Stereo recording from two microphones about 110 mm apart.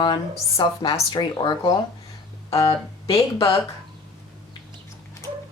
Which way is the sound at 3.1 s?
55° left (ahead or behind).